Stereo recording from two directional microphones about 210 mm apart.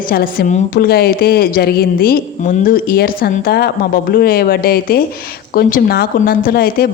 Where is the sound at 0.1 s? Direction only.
45° left (ahead or behind).